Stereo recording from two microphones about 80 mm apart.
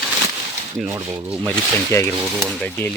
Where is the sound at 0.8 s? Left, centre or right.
Right.